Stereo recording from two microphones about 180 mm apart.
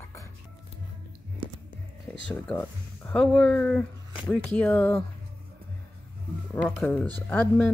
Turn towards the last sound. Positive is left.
turn(degrees=10)  # may be behind; listen again after turning